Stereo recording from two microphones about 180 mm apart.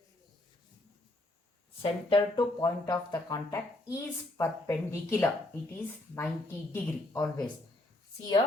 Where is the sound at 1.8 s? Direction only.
30° left (ahead or behind).